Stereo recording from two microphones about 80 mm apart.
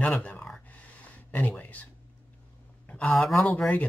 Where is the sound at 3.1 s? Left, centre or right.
Centre.